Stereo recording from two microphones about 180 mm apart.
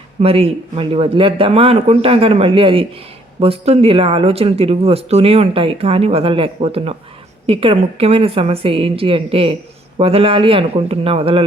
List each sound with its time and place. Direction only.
0.2 s speech: 35° right (ahead or behind)